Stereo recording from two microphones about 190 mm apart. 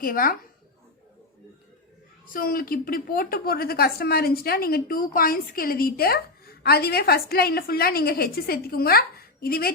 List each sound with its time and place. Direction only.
0.0 s speech: 50° left (ahead or behind)
2.2 s speech: 50° left (ahead or behind)